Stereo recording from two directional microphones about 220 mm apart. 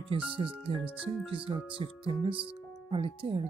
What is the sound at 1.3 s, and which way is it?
Speech, 25° right (ahead or behind).